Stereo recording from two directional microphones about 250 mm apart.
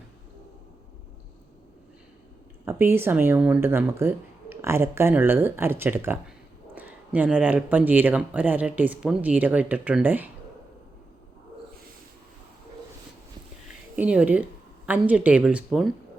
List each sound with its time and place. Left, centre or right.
2.6 s speech: centre
13.9 s speech: centre